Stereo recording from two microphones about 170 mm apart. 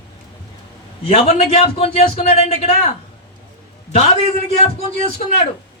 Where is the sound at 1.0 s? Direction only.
35° left (ahead or behind).